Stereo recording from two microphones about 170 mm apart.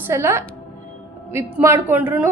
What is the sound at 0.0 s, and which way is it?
A woman's voice, 15° right (ahead or behind).